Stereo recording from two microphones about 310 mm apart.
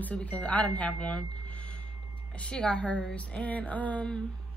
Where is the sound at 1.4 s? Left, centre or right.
Centre.